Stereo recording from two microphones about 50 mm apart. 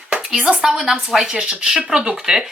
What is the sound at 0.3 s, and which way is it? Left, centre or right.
Speech, centre.